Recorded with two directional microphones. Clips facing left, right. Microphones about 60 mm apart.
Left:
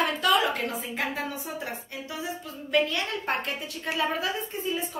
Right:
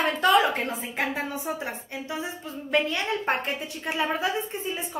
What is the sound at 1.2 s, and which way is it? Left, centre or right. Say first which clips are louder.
Speech: right 3 dB; right.